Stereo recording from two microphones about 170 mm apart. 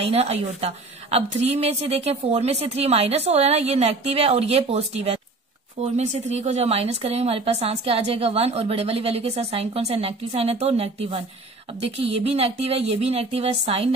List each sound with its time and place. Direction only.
0.0 s speech: 35° right (ahead or behind)